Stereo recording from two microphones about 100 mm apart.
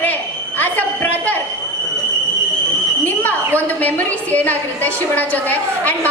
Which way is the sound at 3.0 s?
15° left (ahead or behind).